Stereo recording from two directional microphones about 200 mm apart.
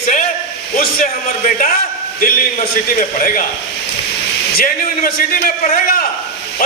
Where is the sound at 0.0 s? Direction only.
40° left (ahead or behind).